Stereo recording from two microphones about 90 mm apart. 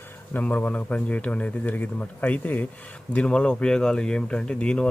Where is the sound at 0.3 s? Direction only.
15° left (ahead or behind).